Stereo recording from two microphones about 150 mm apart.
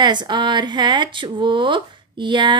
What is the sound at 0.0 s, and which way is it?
Speech, 30° right (ahead or behind).